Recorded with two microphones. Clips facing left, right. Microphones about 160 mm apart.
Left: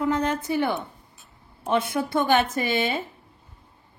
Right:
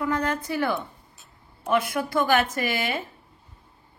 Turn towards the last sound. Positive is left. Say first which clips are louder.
# left 2 dB
turn(degrees=25)  # may be behind; listen again after turning